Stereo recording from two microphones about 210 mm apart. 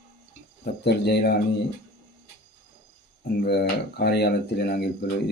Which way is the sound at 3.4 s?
50° left (ahead or behind).